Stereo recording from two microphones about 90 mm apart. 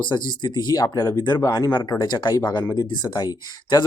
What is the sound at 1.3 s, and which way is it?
Speech, 45° left (ahead or behind).